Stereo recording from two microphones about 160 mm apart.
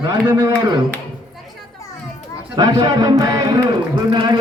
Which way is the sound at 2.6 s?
25° right (ahead or behind).